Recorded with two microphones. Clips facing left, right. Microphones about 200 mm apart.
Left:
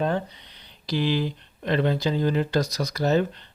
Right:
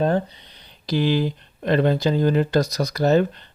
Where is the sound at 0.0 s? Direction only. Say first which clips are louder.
Right 5 dB; 40° right (ahead or behind).